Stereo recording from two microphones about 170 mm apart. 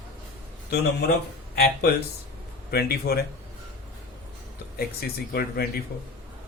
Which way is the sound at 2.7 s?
65° left (ahead or behind).